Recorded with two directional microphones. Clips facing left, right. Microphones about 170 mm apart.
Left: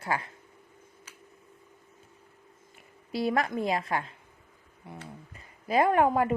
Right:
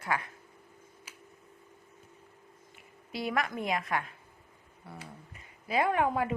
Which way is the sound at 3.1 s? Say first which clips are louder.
Left 5 dB; 35° left (ahead or behind).